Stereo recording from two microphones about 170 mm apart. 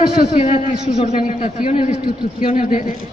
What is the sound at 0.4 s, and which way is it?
A man's voice, 40° left (ahead or behind).